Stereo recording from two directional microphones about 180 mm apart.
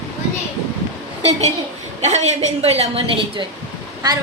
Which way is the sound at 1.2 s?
35° right (ahead or behind).